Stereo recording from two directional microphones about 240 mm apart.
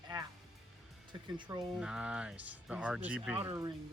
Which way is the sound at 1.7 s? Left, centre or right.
Centre.